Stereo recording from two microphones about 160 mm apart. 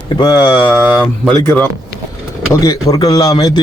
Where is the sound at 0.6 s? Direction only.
10° left (ahead or behind).